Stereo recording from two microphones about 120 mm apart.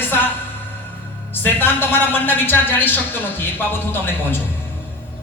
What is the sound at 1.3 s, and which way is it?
Speech, 15° left (ahead or behind).